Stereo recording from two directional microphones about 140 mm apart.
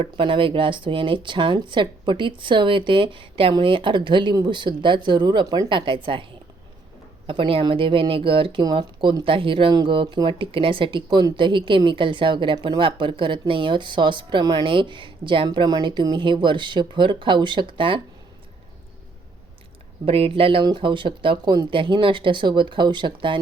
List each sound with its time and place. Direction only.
0.0 s speech: 40° right (ahead or behind)
7.3 s speech: 40° right (ahead or behind)
20.1 s speech: 40° right (ahead or behind)